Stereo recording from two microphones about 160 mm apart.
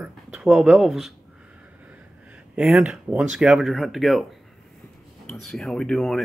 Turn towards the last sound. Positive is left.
turn(degrees=5)  # may be behind; listen again after turning